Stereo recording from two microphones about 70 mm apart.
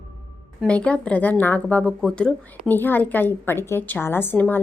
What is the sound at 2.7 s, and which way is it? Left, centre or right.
A woman's voice, left.